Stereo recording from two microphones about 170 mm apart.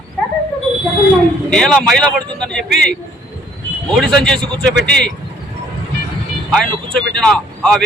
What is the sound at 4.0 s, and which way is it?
Speech, 5° left (ahead or behind).